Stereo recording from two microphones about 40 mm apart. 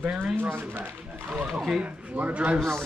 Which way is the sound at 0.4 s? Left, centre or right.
Right.